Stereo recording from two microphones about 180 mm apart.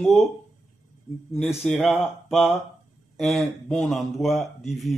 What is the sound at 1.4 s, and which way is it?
Speech, centre (ahead or behind).